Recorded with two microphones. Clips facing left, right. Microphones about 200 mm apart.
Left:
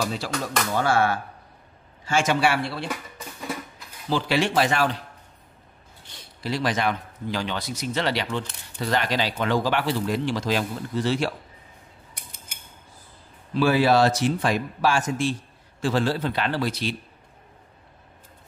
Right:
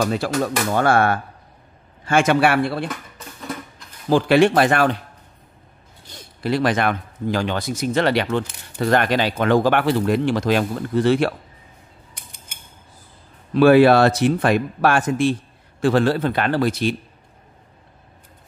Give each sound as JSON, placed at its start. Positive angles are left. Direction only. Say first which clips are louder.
{"t": 0.0, "sound": "speech", "louder": "right 7 dB", "side_deg": -55}
{"t": 2.9, "sound": "music", "louder": "even", "side_deg": 10}
{"t": 4.1, "sound": "speech", "louder": "right 8 dB", "side_deg": -55}
{"t": 6.0, "sound": "speech", "louder": "right 7 dB", "side_deg": -50}
{"t": 13.5, "sound": "speech", "louder": "right 8 dB", "side_deg": -60}